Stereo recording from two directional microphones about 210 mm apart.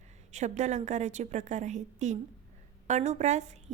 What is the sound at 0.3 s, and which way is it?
A woman's voice, 35° right (ahead or behind).